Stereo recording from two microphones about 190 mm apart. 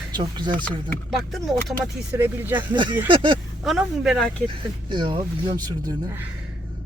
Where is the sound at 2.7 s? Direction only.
25° right (ahead or behind).